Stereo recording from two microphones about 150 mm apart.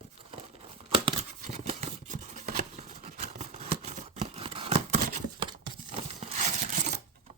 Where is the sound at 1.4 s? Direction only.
55° right (ahead or behind); by 4.9 s 40° right (ahead or behind).